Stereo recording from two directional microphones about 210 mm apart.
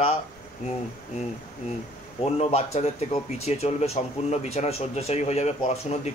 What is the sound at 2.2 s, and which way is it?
Speech, 30° left (ahead or behind).